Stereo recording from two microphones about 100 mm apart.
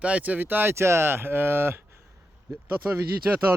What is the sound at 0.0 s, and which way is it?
Speech, 15° right (ahead or behind).